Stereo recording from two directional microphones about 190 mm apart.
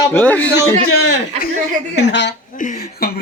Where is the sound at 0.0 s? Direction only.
10° left (ahead or behind).